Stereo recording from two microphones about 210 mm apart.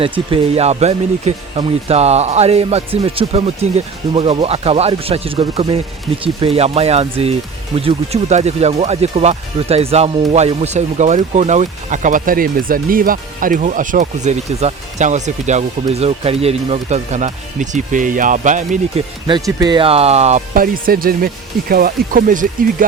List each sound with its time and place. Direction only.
0.3 s speech: 25° right (ahead or behind)
19.3 s speech: 20° right (ahead or behind); by 22.9 s 40° right (ahead or behind)